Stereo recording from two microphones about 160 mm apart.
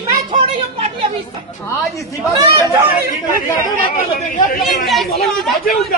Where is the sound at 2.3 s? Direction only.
20° right (ahead or behind).